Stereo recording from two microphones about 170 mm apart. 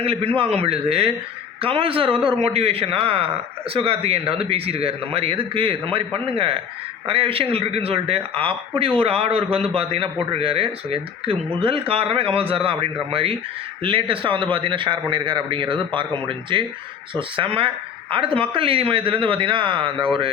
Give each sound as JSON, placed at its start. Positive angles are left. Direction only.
{"t": 0.0, "sound": "a man's voice", "side_deg": -35}